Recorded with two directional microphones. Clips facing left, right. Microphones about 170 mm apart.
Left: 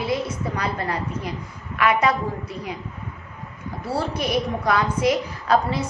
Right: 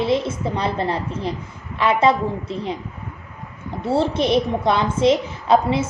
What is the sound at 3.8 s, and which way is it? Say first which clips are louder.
A woman's voice: right 6 dB; 25° right (ahead or behind).